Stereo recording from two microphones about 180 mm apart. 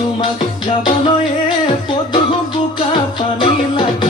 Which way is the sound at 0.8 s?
30° left (ahead or behind).